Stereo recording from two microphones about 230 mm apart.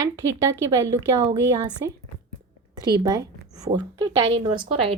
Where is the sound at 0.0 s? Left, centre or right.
Centre.